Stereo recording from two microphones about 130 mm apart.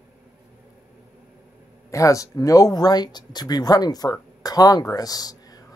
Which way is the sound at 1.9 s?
25° left (ahead or behind).